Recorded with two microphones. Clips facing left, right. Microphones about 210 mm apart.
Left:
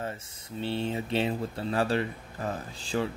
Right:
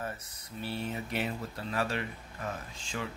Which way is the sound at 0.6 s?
25° left (ahead or behind).